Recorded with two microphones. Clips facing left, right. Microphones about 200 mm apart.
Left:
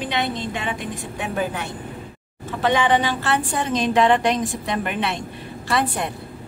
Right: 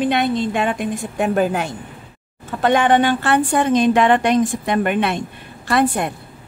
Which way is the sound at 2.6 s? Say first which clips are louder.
Right 4 dB; 55° right (ahead or behind).